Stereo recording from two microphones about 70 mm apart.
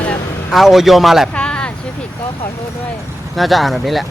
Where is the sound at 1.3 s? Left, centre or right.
Centre.